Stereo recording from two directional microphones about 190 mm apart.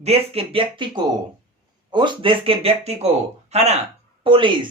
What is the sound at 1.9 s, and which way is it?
Speech, 25° right (ahead or behind).